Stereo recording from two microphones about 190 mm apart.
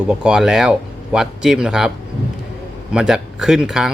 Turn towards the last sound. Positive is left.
turn(degrees=-5)  # may be behind; listen again after turning